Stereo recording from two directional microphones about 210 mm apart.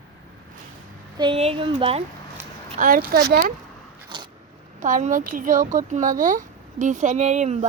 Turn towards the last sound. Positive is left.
turn(degrees=-35)  # may be behind; listen again after turning